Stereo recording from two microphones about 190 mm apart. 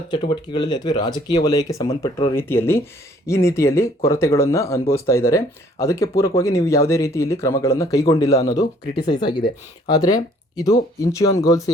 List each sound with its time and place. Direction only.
0.1 s speech: 25° left (ahead or behind)